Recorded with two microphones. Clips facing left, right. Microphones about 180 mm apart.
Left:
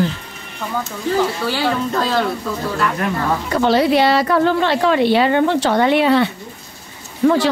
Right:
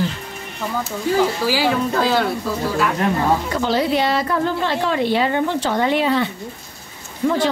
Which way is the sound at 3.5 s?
70° left (ahead or behind).